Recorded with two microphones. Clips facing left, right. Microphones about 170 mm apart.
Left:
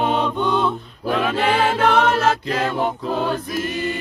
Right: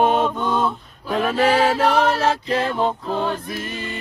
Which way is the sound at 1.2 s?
40° right (ahead or behind).